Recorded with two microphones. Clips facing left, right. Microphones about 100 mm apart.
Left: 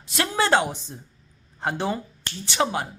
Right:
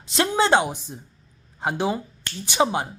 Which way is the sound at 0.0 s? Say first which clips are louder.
Right 3 dB; 20° right (ahead or behind).